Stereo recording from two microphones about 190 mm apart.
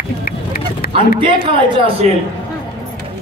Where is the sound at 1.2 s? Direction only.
25° right (ahead or behind).